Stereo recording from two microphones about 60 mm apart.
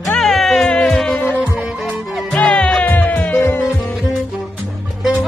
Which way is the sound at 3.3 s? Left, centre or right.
Left.